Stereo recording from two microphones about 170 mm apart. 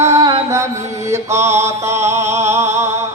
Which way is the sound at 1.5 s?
15° right (ahead or behind).